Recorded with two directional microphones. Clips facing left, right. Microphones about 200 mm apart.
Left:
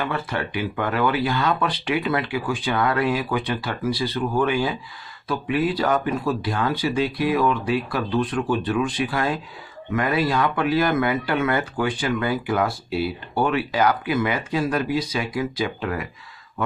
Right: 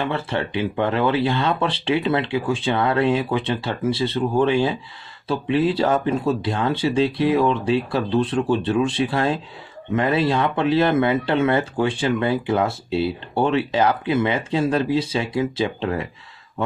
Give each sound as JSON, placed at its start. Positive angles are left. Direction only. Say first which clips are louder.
{"t": 0.0, "sound": "speech", "louder": "right 2 dB", "side_deg": -25}